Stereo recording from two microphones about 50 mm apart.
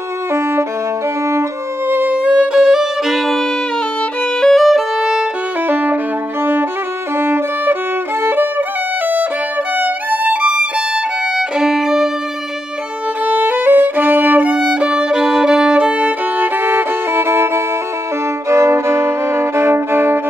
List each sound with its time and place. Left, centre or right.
0.3 s violin: right
1.9 s music: right
2.1 s music: right
2.6 s violin: centre
5.7 s violin: right
7.2 s violin: right
8.2 s music: right
9.8 s violin: right; by 12.1 s centre
13.2 s violin: right
14.7 s violin: centre
16.3 s violin: right
18.5 s violin: right